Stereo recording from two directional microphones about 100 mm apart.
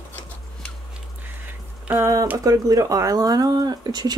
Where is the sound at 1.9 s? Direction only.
30° right (ahead or behind).